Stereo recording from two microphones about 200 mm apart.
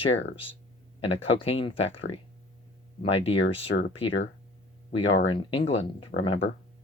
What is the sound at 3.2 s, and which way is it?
Speech, 30° left (ahead or behind).